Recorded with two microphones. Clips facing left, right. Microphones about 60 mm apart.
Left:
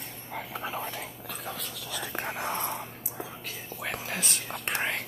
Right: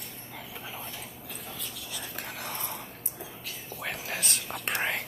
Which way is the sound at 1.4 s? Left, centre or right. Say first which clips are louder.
Left 5 dB; left.